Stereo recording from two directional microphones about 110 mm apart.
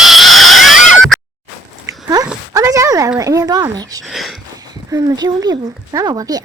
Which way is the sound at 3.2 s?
35° right (ahead or behind).